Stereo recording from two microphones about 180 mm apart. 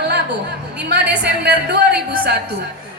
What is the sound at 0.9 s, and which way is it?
A woman's voice, 70° right (ahead or behind).